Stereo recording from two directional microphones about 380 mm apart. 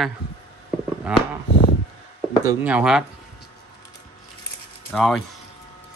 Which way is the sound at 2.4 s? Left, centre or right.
Centre.